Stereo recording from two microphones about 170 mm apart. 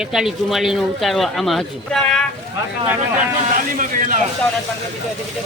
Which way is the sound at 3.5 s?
50° right (ahead or behind).